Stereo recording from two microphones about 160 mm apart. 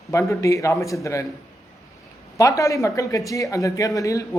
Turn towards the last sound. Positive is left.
turn(degrees=20)  # may be behind; listen again after turning